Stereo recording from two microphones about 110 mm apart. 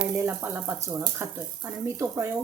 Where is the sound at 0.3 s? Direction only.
20° right (ahead or behind).